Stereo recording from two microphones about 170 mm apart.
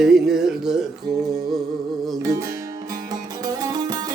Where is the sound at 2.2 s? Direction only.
20° right (ahead or behind).